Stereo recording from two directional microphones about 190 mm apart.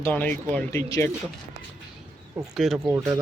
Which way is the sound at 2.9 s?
15° right (ahead or behind).